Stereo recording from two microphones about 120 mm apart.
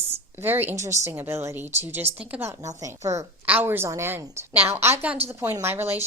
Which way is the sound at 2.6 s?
30° right (ahead or behind).